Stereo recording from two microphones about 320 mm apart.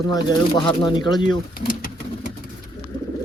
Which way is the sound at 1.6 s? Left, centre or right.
Left.